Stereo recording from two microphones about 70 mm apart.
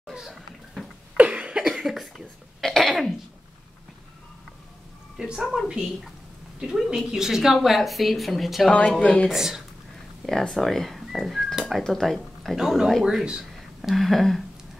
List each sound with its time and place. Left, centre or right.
0.1 s a sound: centre
1.1 s cough: centre
1.6 s cough: centre
5.1 s a woman's voice: centre
8.6 s speech: centre
9.3 s a woman's voice: centre
12.5 s a woman's voice: centre